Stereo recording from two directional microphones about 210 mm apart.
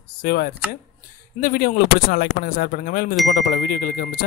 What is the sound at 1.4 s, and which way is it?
Speech, 45° left (ahead or behind).